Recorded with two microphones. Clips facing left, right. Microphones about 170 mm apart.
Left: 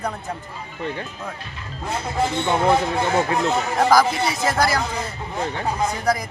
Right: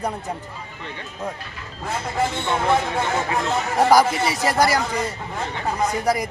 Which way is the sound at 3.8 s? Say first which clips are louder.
Right 1 dB; 10° right (ahead or behind).